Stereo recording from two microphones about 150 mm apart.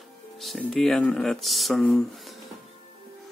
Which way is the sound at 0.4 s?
Centre (ahead or behind).